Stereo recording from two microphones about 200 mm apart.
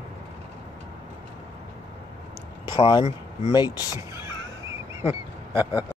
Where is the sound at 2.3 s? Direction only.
30° left (ahead or behind).